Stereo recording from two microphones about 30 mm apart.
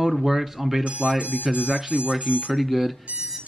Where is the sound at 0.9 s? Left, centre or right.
Right.